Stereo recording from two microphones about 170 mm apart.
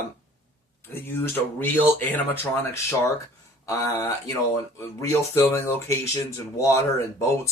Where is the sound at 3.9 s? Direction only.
20° left (ahead or behind).